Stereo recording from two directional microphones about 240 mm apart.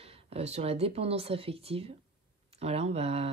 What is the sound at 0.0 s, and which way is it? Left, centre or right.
Speech, right.